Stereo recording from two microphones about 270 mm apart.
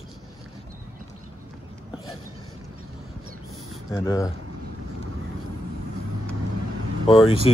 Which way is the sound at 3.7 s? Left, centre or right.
Centre.